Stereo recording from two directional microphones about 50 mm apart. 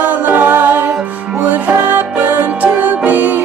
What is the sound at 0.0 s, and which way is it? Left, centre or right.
A capella, right.